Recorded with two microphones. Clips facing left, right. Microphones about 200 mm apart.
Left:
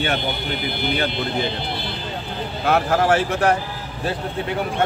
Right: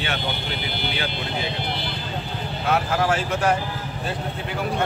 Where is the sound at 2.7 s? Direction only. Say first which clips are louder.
Left 4 dB; 65° left (ahead or behind).